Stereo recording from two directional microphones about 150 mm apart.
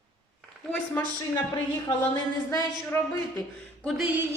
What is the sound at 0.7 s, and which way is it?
Speech, 10° left (ahead or behind).